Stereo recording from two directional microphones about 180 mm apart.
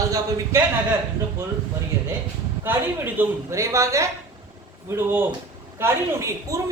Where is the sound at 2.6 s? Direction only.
10° right (ahead or behind).